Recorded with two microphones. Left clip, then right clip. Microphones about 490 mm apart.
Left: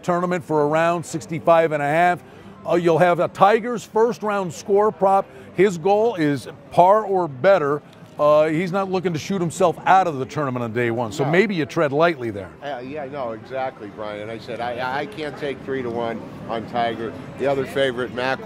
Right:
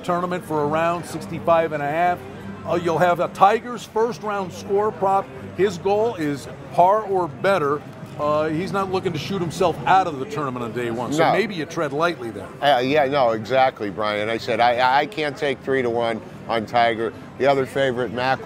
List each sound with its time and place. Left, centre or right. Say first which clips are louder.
0.0 s a man's voice: left 2 dB; left
12.6 s speech: right 14 dB; right